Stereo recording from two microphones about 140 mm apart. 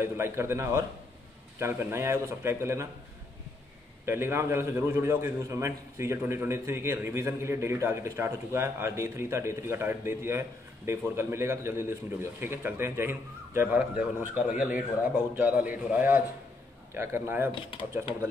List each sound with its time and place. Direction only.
0.0 s a man's voice: 15° right (ahead or behind)
4.0 s a man's voice: 15° right (ahead or behind)
17.6 s speech: 40° left (ahead or behind)